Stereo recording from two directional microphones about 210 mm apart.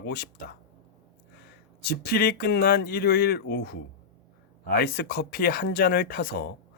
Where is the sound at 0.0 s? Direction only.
50° left (ahead or behind).